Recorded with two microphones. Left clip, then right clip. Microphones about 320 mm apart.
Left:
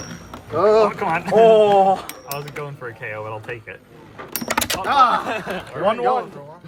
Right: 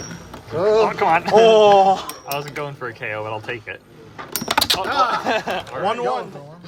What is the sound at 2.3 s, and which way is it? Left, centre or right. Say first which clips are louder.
Mechanisms: right 4 dB; right.